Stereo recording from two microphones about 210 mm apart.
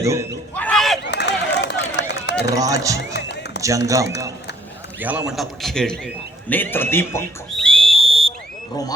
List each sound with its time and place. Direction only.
0.0 s speech: 15° right (ahead or behind)
0.5 s a sound: 5° left (ahead or behind)
1.0 s run: 55° left (ahead or behind)
2.6 s a man's voice: 15° right (ahead or behind)
3.1 s music: 55° left (ahead or behind)
3.6 s a man's voice: 15° right (ahead or behind); by 7.3 s 10° left (ahead or behind)
7.7 s a sound: 25° right (ahead or behind)